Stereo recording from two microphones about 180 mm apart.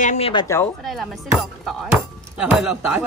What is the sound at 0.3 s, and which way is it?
Speech, 25° left (ahead or behind).